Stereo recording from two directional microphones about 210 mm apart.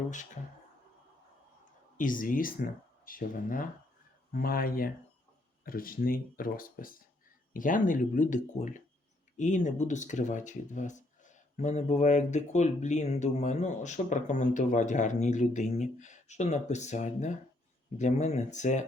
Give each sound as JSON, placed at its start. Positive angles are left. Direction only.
{"t": 2.0, "sound": "speech", "side_deg": 40}